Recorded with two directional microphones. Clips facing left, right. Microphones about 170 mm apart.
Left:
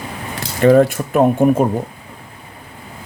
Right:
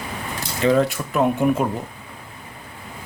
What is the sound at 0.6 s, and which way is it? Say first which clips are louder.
Speech: left 7 dB; 50° left (ahead or behind).